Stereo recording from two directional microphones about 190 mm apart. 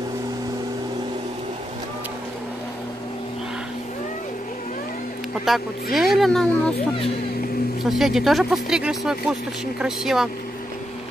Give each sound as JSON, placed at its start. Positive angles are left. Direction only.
{"t": 5.4, "sound": "speech", "side_deg": 0}
{"t": 7.8, "sound": "speech", "side_deg": 0}